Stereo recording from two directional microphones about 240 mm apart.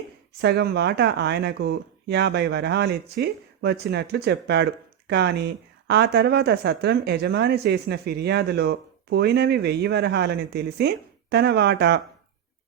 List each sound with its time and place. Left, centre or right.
0.4 s speech: right